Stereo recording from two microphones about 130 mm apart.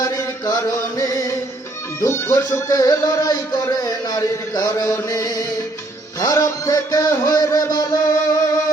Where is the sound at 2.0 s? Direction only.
20° left (ahead or behind).